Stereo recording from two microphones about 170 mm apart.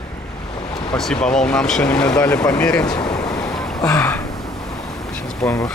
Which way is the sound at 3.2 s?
20° left (ahead or behind).